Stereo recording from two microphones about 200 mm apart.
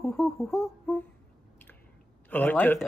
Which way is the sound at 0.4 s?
10° left (ahead or behind).